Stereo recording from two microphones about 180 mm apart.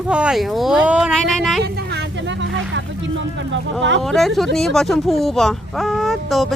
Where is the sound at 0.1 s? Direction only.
5° right (ahead or behind).